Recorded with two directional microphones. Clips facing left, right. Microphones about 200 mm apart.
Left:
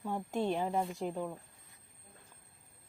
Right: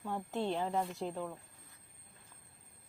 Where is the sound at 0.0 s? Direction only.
15° left (ahead or behind).